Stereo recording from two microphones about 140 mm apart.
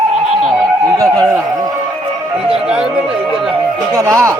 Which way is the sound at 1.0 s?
20° right (ahead or behind).